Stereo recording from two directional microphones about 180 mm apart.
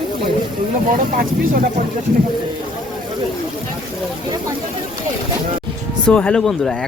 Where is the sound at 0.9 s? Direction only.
50° right (ahead or behind).